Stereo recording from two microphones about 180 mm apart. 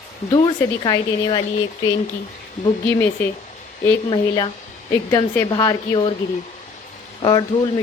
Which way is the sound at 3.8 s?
25° left (ahead or behind).